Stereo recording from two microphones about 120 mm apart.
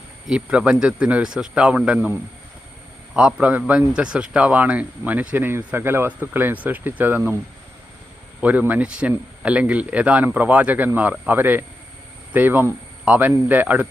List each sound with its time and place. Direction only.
0.3 s a man's voice: 10° right (ahead or behind)
3.2 s a man's voice: 5° right (ahead or behind)
8.4 s a man's voice: 10° right (ahead or behind)